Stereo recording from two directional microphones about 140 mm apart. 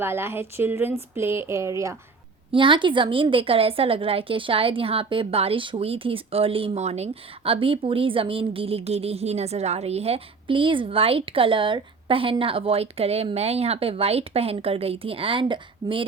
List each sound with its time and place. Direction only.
0.0 s speech: 15° right (ahead or behind)
2.5 s a woman's voice: 35° right (ahead or behind)